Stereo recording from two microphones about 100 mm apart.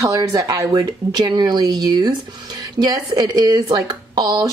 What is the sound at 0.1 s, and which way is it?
Speech, 35° right (ahead or behind).